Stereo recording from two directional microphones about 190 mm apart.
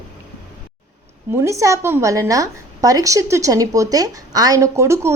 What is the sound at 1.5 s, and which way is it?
A woman's voice, 15° right (ahead or behind).